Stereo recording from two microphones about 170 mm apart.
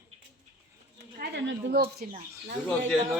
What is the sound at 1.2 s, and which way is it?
Speech, 70° right (ahead or behind).